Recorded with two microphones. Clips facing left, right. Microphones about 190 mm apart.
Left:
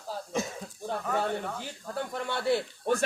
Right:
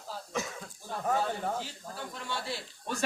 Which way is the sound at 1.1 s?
60° left (ahead or behind).